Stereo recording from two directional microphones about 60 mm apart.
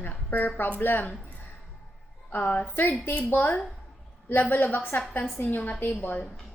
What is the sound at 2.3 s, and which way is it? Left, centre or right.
A woman's voice, left.